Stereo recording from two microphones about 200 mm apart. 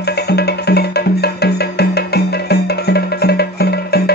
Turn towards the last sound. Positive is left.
turn(degrees=55)  # may be behind; listen again after turning